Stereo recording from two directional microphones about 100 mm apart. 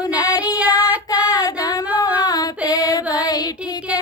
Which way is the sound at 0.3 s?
40° left (ahead or behind).